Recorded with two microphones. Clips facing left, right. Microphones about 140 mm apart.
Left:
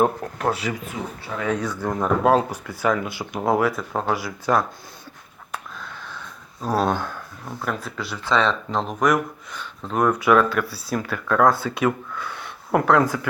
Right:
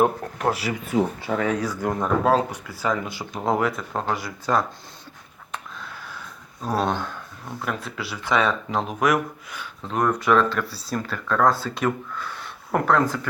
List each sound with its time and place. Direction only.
0.0 s speech: 5° right (ahead or behind)
0.9 s speech: 50° right (ahead or behind)
1.3 s speech: 90° right
1.7 s speech: 10° right (ahead or behind)
2.0 s speech: 5° left (ahead or behind)
5.5 s sniff: centre (ahead or behind)
7.6 s speech: centre (ahead or behind)